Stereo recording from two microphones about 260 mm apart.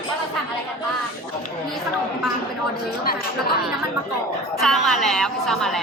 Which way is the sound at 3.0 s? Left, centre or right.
Left.